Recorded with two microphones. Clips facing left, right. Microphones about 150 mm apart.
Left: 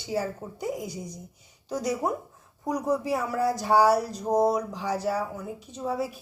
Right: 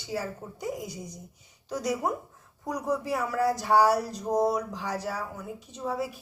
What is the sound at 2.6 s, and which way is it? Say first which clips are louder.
A woman's voice: left 3 dB; 20° left (ahead or behind).